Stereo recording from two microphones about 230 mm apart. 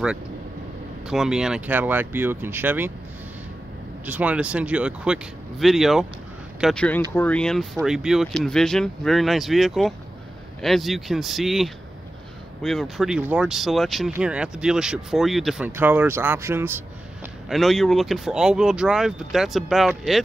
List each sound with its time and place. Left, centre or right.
1.0 s speech: centre
4.0 s speech: centre
17.5 s speech: centre